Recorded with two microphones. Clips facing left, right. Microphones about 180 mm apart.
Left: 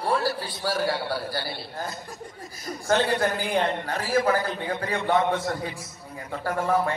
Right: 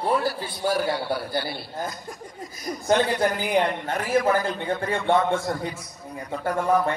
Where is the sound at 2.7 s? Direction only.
25° right (ahead or behind).